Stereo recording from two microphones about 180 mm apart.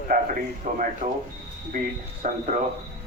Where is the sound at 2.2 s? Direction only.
50° right (ahead or behind).